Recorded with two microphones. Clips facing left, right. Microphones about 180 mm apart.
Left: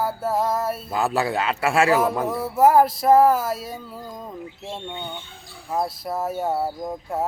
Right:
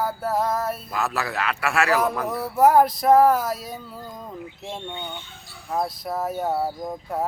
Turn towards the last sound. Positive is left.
turn(degrees=10)  # may be behind; listen again after turning